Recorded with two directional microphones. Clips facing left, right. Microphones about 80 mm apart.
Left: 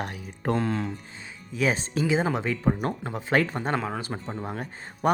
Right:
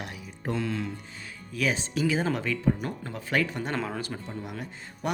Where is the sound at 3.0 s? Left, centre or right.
Left.